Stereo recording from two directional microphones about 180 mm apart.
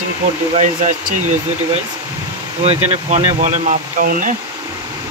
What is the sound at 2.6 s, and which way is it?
Speech, 35° right (ahead or behind).